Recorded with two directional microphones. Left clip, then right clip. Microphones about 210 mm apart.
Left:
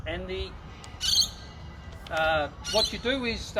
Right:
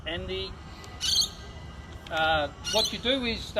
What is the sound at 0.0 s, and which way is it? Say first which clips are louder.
Speech: right 1 dB; 5° left (ahead or behind).